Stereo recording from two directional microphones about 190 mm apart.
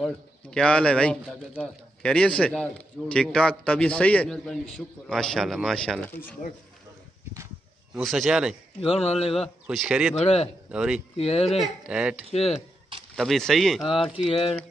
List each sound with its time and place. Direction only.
0.0 s a man's voice: 5° left (ahead or behind)
7.9 s a man's voice: centre (ahead or behind)
8.8 s speech: 30° left (ahead or behind)
9.7 s a man's voice: 5° right (ahead or behind)
10.1 s speech: 30° left (ahead or behind)
10.7 s a man's voice: 5° right (ahead or behind)
11.1 s speech: 35° left (ahead or behind)
11.6 s a man's voice: 5° right (ahead or behind)
12.3 s speech: 35° left (ahead or behind)
13.1 s a man's voice: centre (ahead or behind)